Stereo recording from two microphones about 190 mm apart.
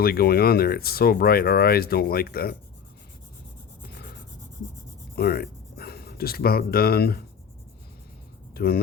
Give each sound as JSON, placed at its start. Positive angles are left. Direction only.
{"t": 0.0, "sound": "speech", "side_deg": 55}
{"t": 5.1, "sound": "speech", "side_deg": 55}
{"t": 8.5, "sound": "speech", "side_deg": 55}